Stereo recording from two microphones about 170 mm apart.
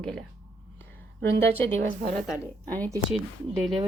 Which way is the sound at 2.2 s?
Centre (ahead or behind).